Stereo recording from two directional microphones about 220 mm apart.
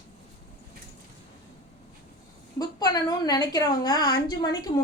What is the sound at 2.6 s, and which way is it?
A woman's voice, 15° left (ahead or behind).